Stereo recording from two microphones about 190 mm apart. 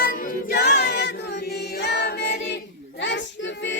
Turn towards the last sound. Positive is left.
turn(degrees=70)  # may be behind; listen again after turning